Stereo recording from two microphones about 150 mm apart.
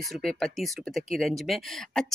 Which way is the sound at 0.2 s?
5° left (ahead or behind).